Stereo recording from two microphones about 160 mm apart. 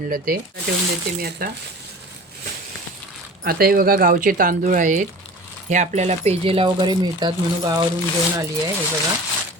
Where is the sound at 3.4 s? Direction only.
65° right (ahead or behind); by 7.8 s 25° right (ahead or behind).